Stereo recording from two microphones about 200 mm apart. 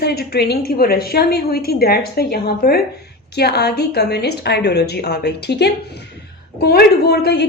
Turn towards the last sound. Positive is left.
turn(degrees=55)  # may be behind; listen again after turning